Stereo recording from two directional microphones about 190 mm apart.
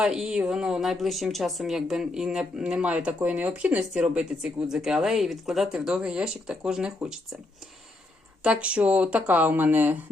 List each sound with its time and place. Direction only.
0.0 s speech: 5° right (ahead or behind)
8.4 s speech: 5° right (ahead or behind)